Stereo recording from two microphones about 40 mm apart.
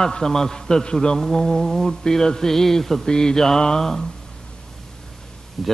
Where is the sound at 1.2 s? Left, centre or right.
Centre.